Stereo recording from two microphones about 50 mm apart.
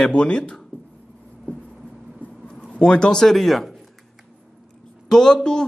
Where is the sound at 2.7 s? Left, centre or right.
Left; by 3.8 s centre.